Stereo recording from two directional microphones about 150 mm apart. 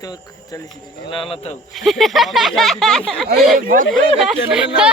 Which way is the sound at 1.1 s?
35° left (ahead or behind).